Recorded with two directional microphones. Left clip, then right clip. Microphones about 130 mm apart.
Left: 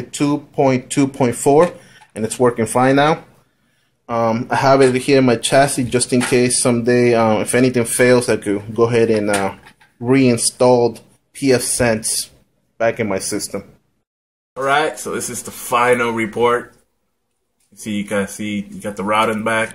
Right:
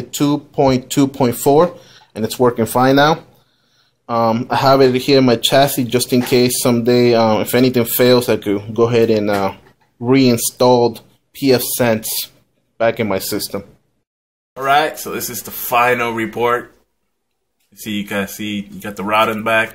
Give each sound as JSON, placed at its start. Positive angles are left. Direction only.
{"t": 0.2, "sound": "speech", "side_deg": -10}
{"t": 12.0, "sound": "speech", "side_deg": -35}
{"t": 12.7, "sound": "speech", "side_deg": -10}
{"t": 17.8, "sound": "speech", "side_deg": -10}